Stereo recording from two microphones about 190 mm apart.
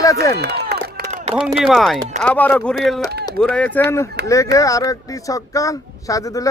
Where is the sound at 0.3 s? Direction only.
60° right (ahead or behind); by 1.3 s 40° right (ahead or behind).